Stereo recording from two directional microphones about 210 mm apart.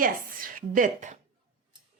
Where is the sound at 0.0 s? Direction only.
40° right (ahead or behind).